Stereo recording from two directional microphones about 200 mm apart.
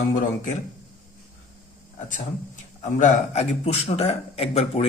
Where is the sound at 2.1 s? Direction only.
35° left (ahead or behind).